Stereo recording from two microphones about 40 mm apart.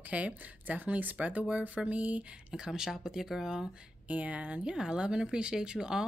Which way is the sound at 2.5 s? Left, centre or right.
Centre.